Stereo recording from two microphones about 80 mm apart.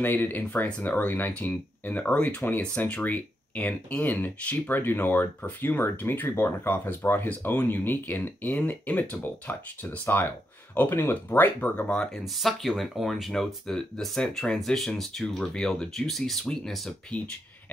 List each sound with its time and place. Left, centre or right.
0.0 s speech: left
12.4 s speech: centre